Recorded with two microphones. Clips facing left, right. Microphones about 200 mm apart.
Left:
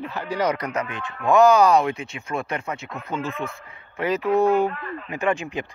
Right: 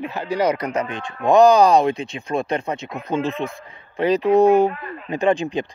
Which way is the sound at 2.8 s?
15° right (ahead or behind).